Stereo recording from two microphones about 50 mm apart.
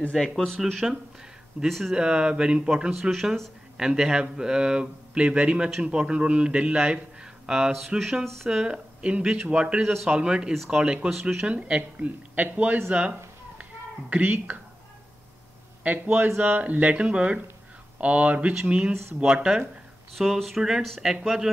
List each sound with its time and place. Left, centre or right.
0.6 s speech: centre
2.0 s a man's voice: centre
2.9 s speech: centre
3.7 s a man's voice: centre
8.0 s speech: centre
8.5 s a man's voice: centre
11.1 s speech: centre
11.4 s a man's voice: right
12.9 s a sound: right
15.8 s a man's voice: right
20.3 s speech: centre
21.0 s speech: centre